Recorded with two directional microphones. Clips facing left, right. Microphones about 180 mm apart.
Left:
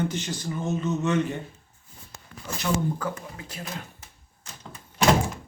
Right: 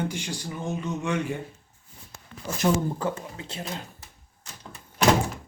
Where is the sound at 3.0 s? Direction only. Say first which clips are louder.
Right 3 dB; 25° right (ahead or behind).